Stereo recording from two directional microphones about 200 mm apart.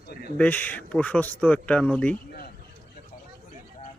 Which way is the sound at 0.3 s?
10° left (ahead or behind).